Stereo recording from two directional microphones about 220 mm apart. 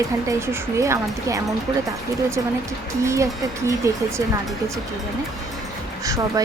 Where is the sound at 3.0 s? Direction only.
15° right (ahead or behind).